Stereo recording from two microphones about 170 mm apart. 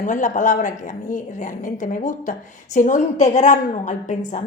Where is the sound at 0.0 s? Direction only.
50° left (ahead or behind).